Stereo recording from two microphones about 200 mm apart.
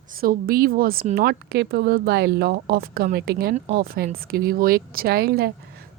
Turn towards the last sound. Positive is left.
turn(degrees=-50)  # may be behind; listen again after turning